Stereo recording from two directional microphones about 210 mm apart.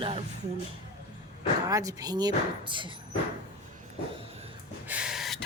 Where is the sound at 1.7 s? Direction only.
15° right (ahead or behind).